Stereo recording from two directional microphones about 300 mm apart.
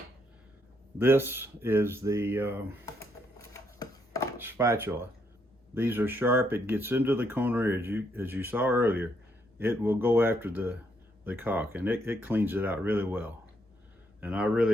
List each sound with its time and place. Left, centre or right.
0.9 s speech: centre
2.8 s a sound: centre
4.4 s speech: centre